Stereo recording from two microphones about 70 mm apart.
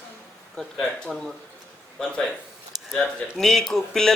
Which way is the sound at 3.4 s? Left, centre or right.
Centre.